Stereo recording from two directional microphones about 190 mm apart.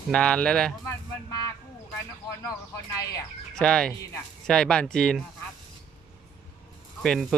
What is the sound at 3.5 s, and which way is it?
Speech, 5° left (ahead or behind).